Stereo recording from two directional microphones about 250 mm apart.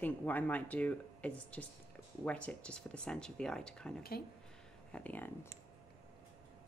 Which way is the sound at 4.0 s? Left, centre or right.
Left.